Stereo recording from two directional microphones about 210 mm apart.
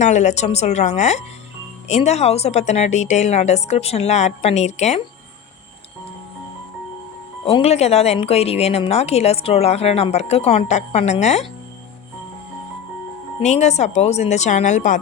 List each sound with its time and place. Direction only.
0.0 s a woman's voice: 35° left (ahead or behind)
7.4 s a woman's voice: 25° left (ahead or behind)
13.4 s a woman's voice: 35° left (ahead or behind)